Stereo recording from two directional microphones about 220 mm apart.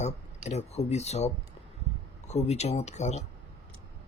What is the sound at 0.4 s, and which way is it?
Speech, 30° left (ahead or behind).